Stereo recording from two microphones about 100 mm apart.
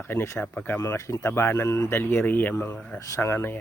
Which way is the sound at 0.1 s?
25° left (ahead or behind).